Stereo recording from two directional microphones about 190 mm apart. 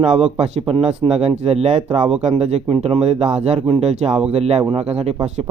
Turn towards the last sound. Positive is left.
turn(degrees=-35)  # may be behind; listen again after turning